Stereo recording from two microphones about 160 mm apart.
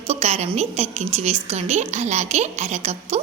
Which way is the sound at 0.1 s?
45° right (ahead or behind).